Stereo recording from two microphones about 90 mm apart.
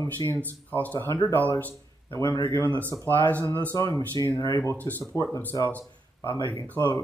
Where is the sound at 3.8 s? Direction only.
40° left (ahead or behind).